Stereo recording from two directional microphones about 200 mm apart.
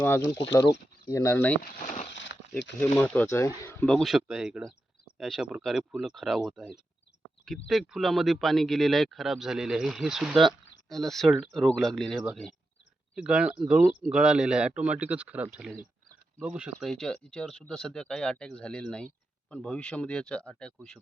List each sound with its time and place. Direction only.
0.5 s speech: 15° left (ahead or behind)
1.8 s speech: 35° left (ahead or behind)
2.1 s a sound: 65° left (ahead or behind)
3.0 s speech: 10° left (ahead or behind)